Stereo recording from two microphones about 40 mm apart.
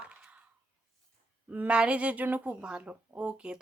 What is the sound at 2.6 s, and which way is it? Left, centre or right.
Speech, right.